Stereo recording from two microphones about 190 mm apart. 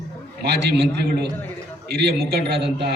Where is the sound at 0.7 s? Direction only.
60° right (ahead or behind).